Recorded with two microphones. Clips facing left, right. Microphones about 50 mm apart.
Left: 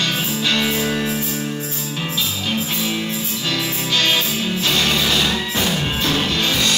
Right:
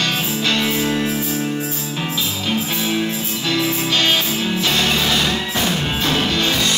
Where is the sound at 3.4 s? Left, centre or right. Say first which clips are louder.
Right 5 dB; centre.